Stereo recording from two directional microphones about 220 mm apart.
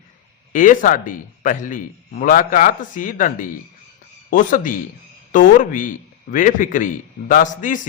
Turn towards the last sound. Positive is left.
turn(degrees=35)  # may be behind; listen again after turning